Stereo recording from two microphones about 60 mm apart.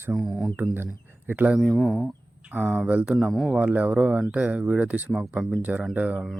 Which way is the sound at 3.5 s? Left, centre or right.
Right.